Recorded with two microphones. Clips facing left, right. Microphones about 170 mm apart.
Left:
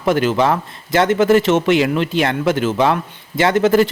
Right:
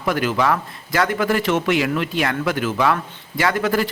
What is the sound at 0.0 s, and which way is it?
A man's voice, 25° left (ahead or behind).